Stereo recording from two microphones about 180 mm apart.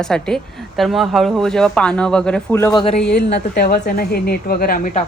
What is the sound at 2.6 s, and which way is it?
Speech, 25° left (ahead or behind).